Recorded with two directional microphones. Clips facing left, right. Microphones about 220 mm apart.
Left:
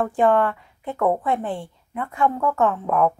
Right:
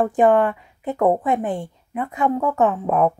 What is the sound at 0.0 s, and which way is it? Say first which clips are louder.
A woman's voice: right 3 dB; 20° right (ahead or behind).